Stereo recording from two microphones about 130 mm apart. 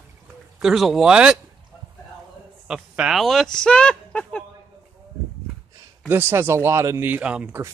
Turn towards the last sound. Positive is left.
turn(degrees=-10)  # may be behind; listen again after turning